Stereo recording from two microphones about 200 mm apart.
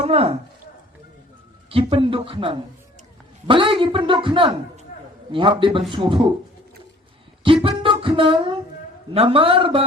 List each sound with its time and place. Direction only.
0.0 s a man's voice: 30° right (ahead or behind)
1.7 s a man's voice: 25° right (ahead or behind)
7.4 s a sound: 25° right (ahead or behind)
9.1 s a man's voice: 30° right (ahead or behind)